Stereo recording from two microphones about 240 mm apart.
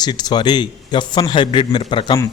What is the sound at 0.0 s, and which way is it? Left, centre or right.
A man's voice, centre.